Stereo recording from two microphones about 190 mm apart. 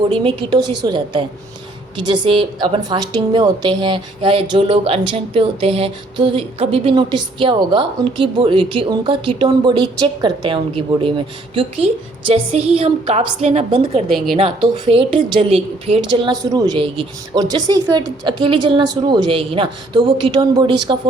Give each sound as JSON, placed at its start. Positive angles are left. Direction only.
{"t": 0.1, "sound": "a woman's voice", "side_deg": -30}
{"t": 12.3, "sound": "a woman's voice", "side_deg": -30}